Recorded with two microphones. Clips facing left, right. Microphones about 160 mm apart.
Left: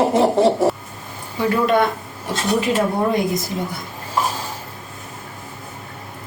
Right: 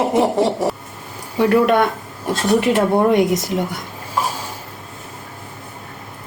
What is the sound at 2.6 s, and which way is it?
A woman's voice, 65° right (ahead or behind).